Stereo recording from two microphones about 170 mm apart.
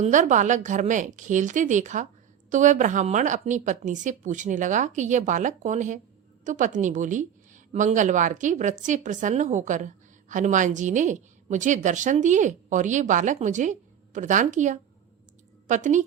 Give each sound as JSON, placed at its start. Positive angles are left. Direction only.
{"t": 0.0, "sound": "a woman's voice", "side_deg": -45}